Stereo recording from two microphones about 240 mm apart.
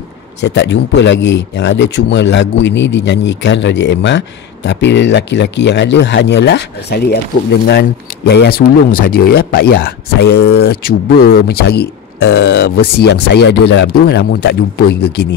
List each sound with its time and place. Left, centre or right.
0.4 s speech: left
8.3 s speech: left